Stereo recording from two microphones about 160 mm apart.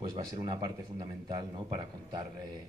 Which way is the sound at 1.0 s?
25° right (ahead or behind).